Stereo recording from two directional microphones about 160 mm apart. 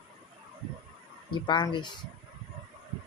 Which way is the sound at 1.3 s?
30° left (ahead or behind).